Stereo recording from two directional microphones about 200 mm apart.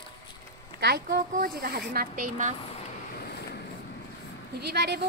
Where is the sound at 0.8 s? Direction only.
55° right (ahead or behind).